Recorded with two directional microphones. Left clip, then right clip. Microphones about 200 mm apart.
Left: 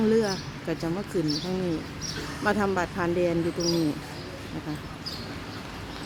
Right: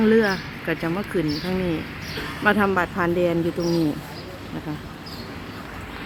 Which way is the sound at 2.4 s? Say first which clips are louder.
Right 6 dB; 5° right (ahead or behind).